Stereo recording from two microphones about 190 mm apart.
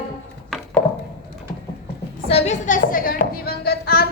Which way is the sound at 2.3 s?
35° left (ahead or behind).